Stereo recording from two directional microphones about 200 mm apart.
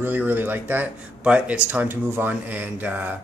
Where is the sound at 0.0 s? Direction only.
10° right (ahead or behind).